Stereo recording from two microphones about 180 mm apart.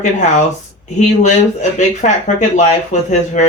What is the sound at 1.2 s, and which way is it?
Speech, 40° left (ahead or behind).